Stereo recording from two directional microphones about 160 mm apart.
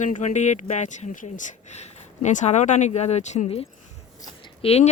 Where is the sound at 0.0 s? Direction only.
50° left (ahead or behind).